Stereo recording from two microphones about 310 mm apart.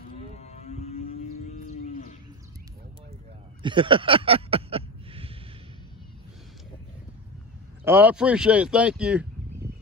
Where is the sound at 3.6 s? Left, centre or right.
Centre.